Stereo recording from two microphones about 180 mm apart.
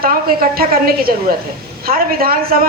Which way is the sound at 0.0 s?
55° right (ahead or behind).